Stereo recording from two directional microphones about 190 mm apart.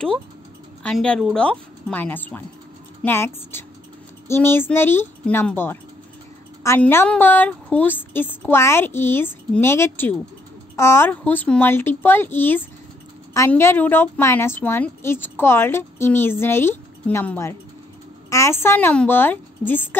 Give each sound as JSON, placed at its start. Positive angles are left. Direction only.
{"t": 0.8, "sound": "a woman's voice", "side_deg": 5}